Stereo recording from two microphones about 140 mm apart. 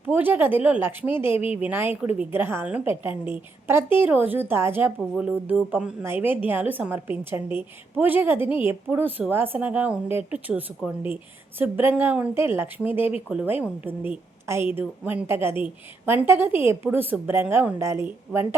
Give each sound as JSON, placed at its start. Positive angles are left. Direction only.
{"t": 0.0, "sound": "a woman's voice", "side_deg": -15}
{"t": 11.6, "sound": "a woman's voice", "side_deg": -15}